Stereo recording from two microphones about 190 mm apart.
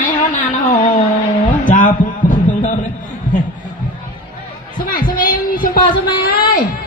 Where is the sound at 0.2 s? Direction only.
40° left (ahead or behind).